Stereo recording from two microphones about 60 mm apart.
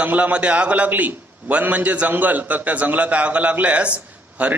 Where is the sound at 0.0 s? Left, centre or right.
Right.